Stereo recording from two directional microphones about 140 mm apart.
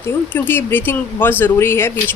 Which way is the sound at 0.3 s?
15° left (ahead or behind).